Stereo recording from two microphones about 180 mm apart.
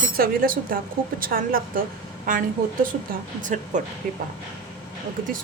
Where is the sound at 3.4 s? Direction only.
45° right (ahead or behind).